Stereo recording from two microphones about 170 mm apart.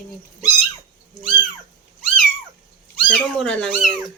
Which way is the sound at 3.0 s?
5° left (ahead or behind).